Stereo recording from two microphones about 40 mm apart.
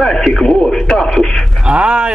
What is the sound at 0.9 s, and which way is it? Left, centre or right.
Speech, centre.